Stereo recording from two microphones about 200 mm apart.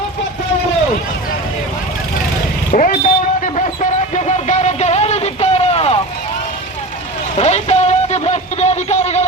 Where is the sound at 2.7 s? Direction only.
40° left (ahead or behind).